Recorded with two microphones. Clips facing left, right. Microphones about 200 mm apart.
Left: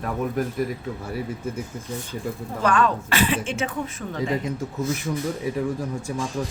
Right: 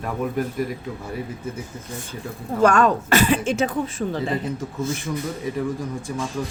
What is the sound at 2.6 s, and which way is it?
Speech, 45° right (ahead or behind).